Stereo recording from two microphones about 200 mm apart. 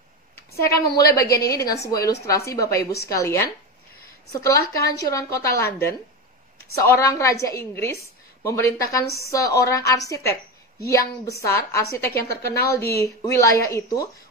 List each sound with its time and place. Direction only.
0.6 s speech: 15° left (ahead or behind)
2.8 s a woman's voice: 55° left (ahead or behind)
3.1 s speech: 15° left (ahead or behind)
9.0 s a woman's voice: 50° left (ahead or behind)
9.3 s speech: 15° left (ahead or behind)
11.4 s speech: 15° left (ahead or behind)